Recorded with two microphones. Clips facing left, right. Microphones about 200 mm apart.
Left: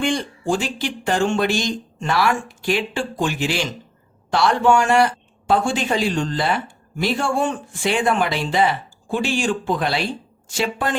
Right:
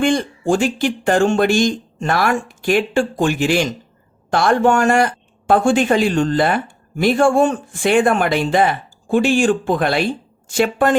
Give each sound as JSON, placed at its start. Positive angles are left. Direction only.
{"t": 0.0, "sound": "a man's voice", "side_deg": -50}